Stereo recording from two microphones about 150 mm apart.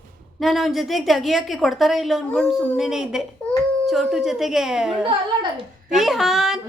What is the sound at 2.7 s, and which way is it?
A woman's voice, 5° right (ahead or behind).